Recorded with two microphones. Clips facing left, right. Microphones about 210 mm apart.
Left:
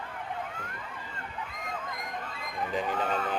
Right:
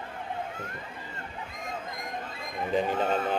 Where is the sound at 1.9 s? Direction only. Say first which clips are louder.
Right 1 dB; 25° right (ahead or behind).